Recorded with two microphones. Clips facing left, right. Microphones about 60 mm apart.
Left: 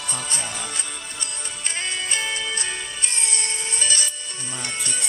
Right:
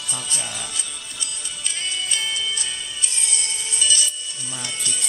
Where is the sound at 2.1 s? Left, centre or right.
Left.